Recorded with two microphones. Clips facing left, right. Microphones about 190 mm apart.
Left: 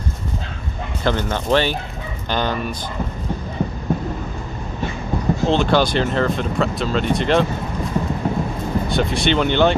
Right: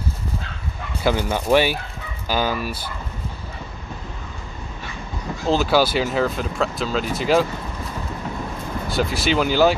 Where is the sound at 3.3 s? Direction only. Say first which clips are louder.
Left 11 dB; 55° left (ahead or behind).